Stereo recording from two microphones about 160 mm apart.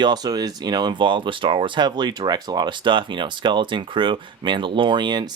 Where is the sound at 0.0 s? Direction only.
25° right (ahead or behind).